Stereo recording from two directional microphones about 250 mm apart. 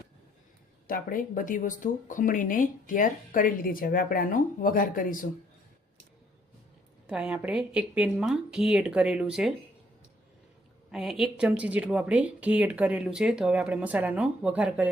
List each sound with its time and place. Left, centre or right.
0.9 s speech: left
7.1 s speech: centre
10.9 s speech: centre